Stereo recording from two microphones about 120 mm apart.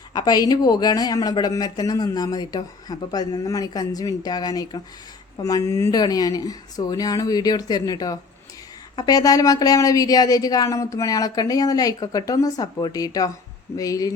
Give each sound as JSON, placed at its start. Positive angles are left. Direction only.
{"t": 0.1, "sound": "speech", "side_deg": 35}